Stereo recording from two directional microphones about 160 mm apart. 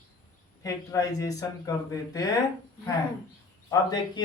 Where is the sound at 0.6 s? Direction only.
20° left (ahead or behind).